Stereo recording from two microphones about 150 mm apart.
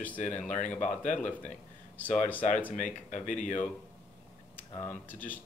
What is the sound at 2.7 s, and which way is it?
Speech, 55° left (ahead or behind).